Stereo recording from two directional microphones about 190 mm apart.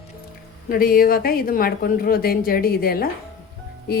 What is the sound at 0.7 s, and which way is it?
A woman's voice, 50° left (ahead or behind).